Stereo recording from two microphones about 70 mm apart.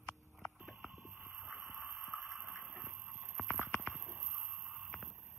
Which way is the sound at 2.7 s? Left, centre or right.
Right.